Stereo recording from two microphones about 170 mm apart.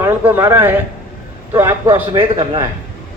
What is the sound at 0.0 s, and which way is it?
A man's voice, 15° right (ahead or behind).